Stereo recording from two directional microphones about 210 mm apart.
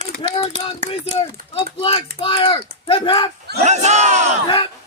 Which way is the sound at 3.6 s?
35° right (ahead or behind).